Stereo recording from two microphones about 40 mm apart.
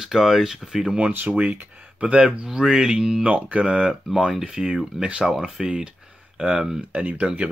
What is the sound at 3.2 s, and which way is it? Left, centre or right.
Speech, right.